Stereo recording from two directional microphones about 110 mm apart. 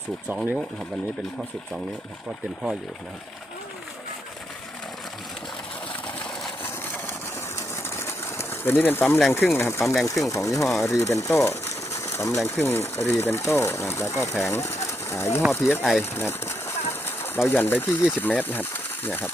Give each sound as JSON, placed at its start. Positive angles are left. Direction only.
{"t": 6.9, "sound": "pigeon", "side_deg": 20}
{"t": 9.3, "sound": "speech", "side_deg": 20}
{"t": 9.8, "sound": "speech", "side_deg": 0}
{"t": 10.1, "sound": "speech", "side_deg": 30}
{"t": 15.8, "sound": "speech", "side_deg": 0}
{"t": 16.1, "sound": "speech", "side_deg": 20}